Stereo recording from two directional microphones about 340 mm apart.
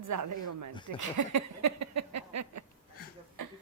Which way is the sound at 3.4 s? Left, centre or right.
Right.